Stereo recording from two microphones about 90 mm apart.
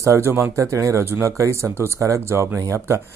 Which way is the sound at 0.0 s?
30° right (ahead or behind).